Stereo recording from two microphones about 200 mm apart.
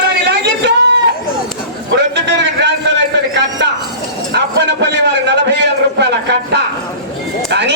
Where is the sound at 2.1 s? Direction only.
60° right (ahead or behind).